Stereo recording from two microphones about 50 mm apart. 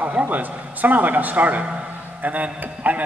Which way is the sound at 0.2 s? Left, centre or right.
Right.